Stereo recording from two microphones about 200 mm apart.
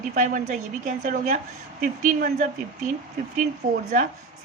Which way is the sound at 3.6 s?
40° right (ahead or behind).